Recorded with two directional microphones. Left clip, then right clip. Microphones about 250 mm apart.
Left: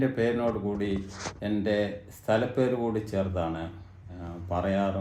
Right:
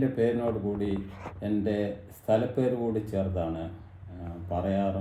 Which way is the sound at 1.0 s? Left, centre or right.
Right.